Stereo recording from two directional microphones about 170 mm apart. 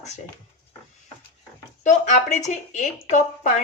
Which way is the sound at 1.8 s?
45° left (ahead or behind).